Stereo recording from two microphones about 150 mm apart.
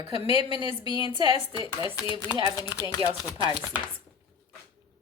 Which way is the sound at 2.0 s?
25° left (ahead or behind).